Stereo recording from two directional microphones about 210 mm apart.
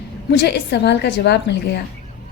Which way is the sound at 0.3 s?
55° left (ahead or behind).